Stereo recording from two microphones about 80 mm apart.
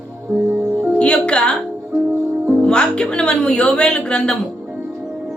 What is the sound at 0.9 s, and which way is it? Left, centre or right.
Speech, centre.